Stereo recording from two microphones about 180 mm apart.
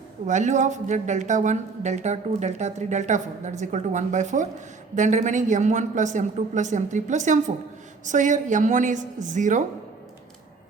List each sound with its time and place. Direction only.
0.3 s a woman's voice: 40° right (ahead or behind)